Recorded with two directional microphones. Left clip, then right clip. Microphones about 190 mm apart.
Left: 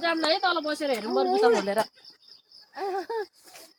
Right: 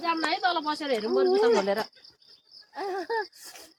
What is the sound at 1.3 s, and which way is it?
Speech, centre (ahead or behind).